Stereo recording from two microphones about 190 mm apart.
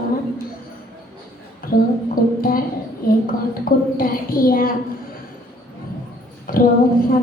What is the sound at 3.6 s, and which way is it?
A woman's voice, 50° left (ahead or behind).